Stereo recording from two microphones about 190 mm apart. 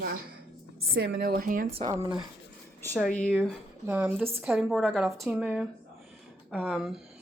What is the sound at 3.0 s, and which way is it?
Speech, 5° left (ahead or behind).